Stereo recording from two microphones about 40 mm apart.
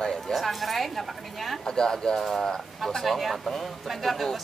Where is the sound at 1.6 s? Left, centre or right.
Centre.